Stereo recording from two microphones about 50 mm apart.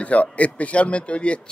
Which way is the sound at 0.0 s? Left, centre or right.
Left.